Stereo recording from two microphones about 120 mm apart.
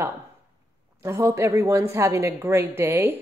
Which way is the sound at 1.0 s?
25° right (ahead or behind).